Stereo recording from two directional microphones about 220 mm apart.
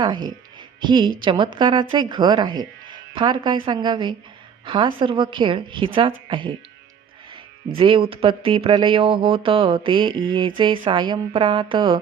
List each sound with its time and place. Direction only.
0.0 s a woman's voice: 20° right (ahead or behind)
7.8 s speech: 25° right (ahead or behind)